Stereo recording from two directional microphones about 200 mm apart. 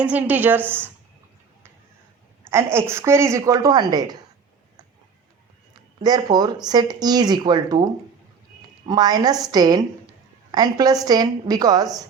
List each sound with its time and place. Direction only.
0.0 s a woman's voice: 10° right (ahead or behind)
2.4 s a woman's voice: 10° right (ahead or behind)
6.0 s speech: 20° right (ahead or behind)
8.9 s speech: 20° right (ahead or behind)